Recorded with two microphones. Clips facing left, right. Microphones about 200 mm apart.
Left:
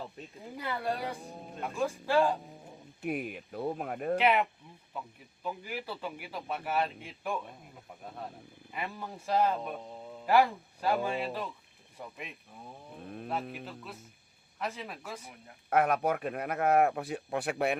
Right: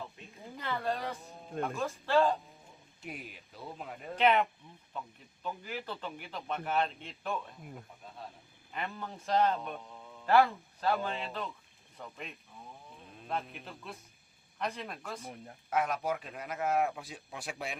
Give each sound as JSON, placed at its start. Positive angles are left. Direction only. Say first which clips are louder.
{"t": 0.2, "sound": "a sound", "louder": "left 6 dB", "side_deg": 40}
{"t": 0.5, "sound": "speech", "louder": "left 1 dB", "side_deg": 15}
{"t": 3.0, "sound": "speech", "louder": "left 11 dB", "side_deg": 60}
{"t": 4.2, "sound": "speech", "louder": "right 3 dB", "side_deg": 10}
{"t": 8.7, "sound": "speech", "louder": "left 1 dB", "side_deg": 10}
{"t": 13.0, "sound": "speech", "louder": "left 10 dB", "side_deg": 55}
{"t": 13.5, "sound": "speech", "louder": "left 3 dB", "side_deg": 0}
{"t": 15.7, "sound": "speech", "louder": "left 5 dB", "side_deg": 60}